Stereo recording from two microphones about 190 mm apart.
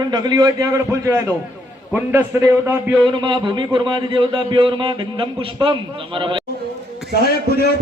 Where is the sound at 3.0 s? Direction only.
25° right (ahead or behind).